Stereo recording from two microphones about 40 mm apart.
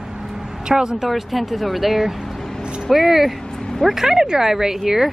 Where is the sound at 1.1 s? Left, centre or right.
Centre.